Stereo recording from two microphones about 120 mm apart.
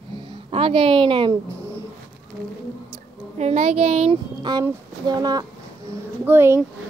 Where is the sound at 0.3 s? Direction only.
50° right (ahead or behind).